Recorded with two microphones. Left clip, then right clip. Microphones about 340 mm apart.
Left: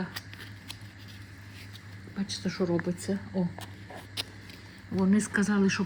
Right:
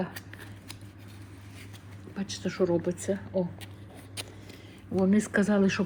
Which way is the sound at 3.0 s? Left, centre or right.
Right.